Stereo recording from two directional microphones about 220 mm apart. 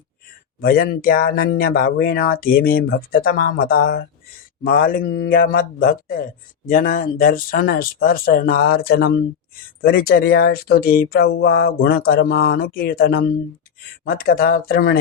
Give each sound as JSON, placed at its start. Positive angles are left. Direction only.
{"t": 0.6, "sound": "speech", "side_deg": 45}